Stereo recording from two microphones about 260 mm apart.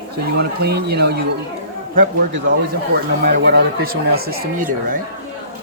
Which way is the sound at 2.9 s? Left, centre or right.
Right.